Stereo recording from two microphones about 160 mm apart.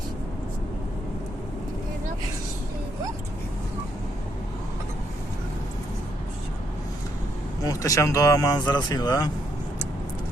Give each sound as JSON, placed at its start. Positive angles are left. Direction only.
{"t": 7.6, "sound": "speech", "side_deg": 20}